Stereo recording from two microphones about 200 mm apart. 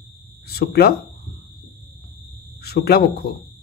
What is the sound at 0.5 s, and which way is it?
Speech, 50° left (ahead or behind).